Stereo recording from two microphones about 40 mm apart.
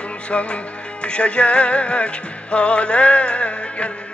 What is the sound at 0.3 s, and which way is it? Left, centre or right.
Music, left.